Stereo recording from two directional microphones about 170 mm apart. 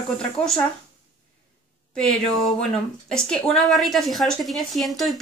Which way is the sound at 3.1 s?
5° left (ahead or behind).